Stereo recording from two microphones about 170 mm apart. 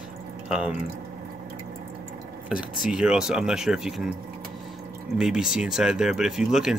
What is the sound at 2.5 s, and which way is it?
Speech, 5° right (ahead or behind).